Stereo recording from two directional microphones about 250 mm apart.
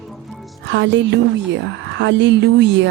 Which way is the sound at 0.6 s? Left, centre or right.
Right.